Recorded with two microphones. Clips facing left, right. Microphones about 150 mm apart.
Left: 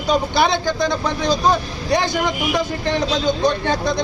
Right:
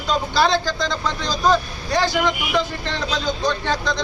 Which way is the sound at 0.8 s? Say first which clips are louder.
Left 4 dB; 55° left (ahead or behind).